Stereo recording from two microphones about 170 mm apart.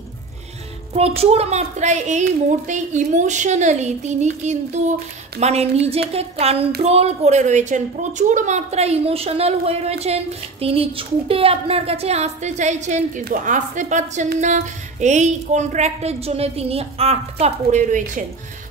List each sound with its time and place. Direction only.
0.9 s a woman's voice: 35° right (ahead or behind)